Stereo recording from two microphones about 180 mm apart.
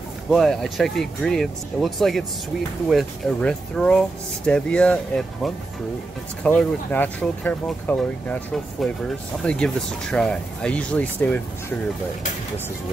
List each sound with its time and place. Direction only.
0.3 s speech: centre (ahead or behind)